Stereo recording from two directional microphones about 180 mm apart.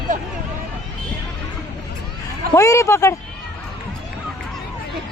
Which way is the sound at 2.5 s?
15° left (ahead or behind).